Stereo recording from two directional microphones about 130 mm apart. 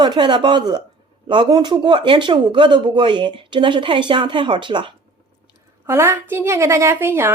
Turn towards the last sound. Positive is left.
turn(degrees=-15)  # may be behind; listen again after turning